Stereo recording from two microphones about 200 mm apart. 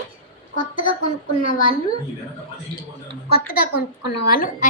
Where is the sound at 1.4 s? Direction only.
45° left (ahead or behind).